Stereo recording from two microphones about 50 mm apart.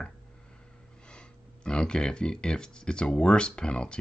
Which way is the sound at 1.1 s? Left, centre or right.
Centre.